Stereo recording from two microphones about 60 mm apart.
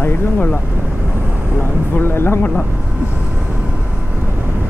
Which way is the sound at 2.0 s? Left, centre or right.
Left.